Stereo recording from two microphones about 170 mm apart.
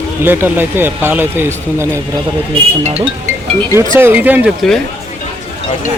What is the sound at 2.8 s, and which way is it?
Speech, 35° right (ahead or behind).